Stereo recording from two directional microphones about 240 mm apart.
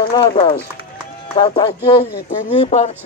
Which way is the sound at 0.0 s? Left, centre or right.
Left.